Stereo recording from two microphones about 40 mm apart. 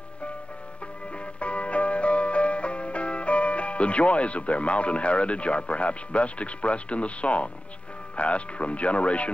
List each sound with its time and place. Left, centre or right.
1.4 s music: left
8.2 s speech: left